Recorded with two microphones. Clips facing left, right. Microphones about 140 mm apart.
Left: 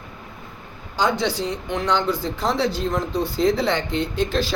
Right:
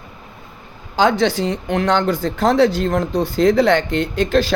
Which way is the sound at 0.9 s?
90° right.